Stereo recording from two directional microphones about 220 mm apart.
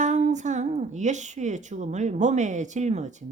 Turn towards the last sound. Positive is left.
turn(degrees=-35)  # may be behind; listen again after turning